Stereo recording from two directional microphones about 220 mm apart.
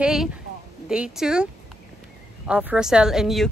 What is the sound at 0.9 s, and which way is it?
Speech, 5° right (ahead or behind).